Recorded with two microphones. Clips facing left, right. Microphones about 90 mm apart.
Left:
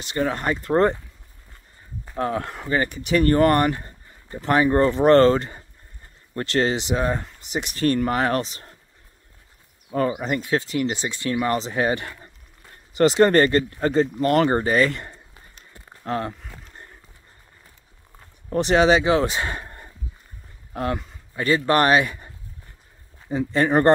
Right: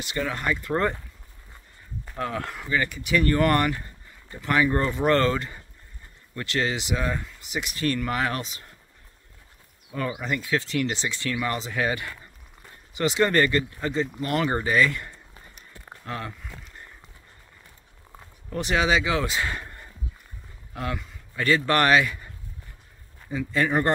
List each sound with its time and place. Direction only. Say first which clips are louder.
0.1 s speech: left 4 dB; 35° left (ahead or behind)
2.1 s speech: left 5 dB; 30° left (ahead or behind)
9.8 s speech: left 6 dB; 40° left (ahead or behind)
10.8 s a man's voice: left 2 dB; 20° left (ahead or behind)
11.4 s speech: left 5 dB; 30° left (ahead or behind)
12.9 s speech: left 6 dB; 40° left (ahead or behind)
15.7 s a sound: left 8 dB; 35° left (ahead or behind)
18.5 s speech: left 6 dB; 30° left (ahead or behind)
21.4 s a man's voice: left 3 dB; 25° left (ahead or behind)
23.3 s speech: left 5 dB; 35° left (ahead or behind)